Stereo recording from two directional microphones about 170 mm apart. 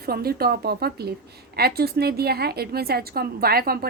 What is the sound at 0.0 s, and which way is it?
A woman's voice, 65° right (ahead or behind).